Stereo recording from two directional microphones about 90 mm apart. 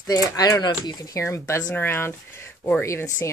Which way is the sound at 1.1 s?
30° left (ahead or behind).